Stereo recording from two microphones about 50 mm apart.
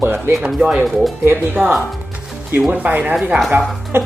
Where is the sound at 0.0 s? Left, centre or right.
Right.